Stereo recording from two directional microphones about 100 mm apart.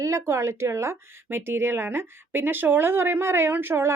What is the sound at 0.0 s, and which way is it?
Speech, 30° right (ahead or behind).